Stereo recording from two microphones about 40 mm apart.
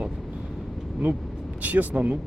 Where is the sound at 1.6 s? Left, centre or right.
Right.